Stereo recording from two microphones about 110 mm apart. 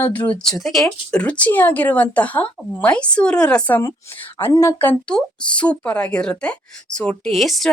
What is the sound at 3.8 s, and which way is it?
Speech, 25° left (ahead or behind).